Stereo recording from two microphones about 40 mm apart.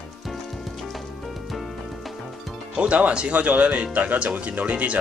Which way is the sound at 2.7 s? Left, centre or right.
Right.